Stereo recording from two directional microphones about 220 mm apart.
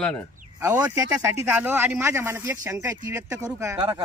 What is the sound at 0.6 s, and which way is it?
Speech, 10° right (ahead or behind).